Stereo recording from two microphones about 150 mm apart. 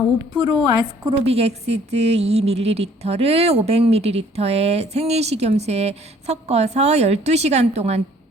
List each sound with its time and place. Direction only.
0.4 s a woman's voice: 25° right (ahead or behind); by 8.0 s 45° right (ahead or behind)